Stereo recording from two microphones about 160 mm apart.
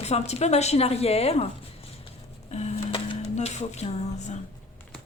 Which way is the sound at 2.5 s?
45° left (ahead or behind).